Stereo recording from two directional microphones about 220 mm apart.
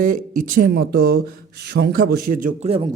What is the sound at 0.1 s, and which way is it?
Speech, 40° right (ahead or behind).